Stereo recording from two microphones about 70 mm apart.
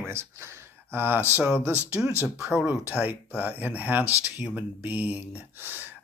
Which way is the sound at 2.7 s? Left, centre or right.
Right.